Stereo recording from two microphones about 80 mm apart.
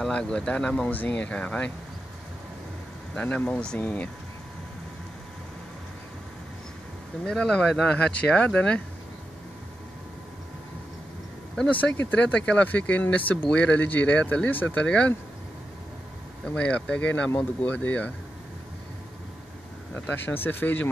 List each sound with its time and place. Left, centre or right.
0.0 s speech: centre
3.2 s speech: centre
7.2 s speech: centre
11.7 s speech: left
16.4 s speech: centre
20.1 s speech: left